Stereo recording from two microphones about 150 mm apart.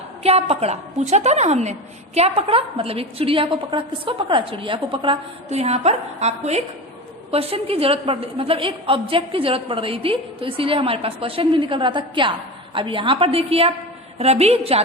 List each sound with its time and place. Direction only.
0.2 s a woman's voice: 45° right (ahead or behind)